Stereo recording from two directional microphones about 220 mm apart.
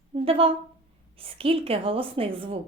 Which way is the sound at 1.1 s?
25° right (ahead or behind).